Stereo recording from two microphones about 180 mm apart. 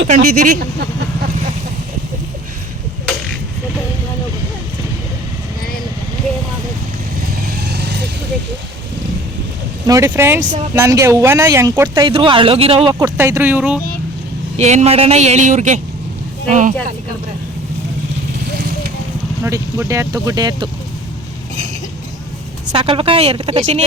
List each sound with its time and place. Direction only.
0.1 s speech: 50° right (ahead or behind)
7.6 s vehicle: 65° right (ahead or behind)
9.8 s speech: 15° right (ahead or behind)
12.0 s speech: 30° right (ahead or behind)
12.9 s speech: 15° right (ahead or behind)
14.6 s speech: 40° right (ahead or behind)
19.5 s speech: 15° right (ahead or behind)
22.7 s speech: 30° right (ahead or behind)